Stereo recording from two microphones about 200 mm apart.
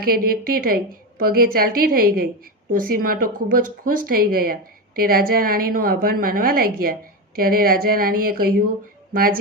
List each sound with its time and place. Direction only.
0.0 s a woman's voice: 50° right (ahead or behind)